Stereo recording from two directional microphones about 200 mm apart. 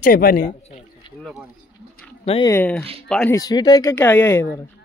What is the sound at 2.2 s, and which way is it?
Speech, 30° left (ahead or behind).